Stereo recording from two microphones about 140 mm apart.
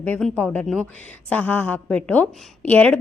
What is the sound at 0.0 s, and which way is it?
A woman's voice, 10° left (ahead or behind).